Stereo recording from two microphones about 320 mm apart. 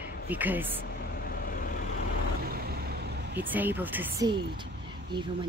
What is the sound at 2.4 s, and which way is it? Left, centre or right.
Vehicle, right.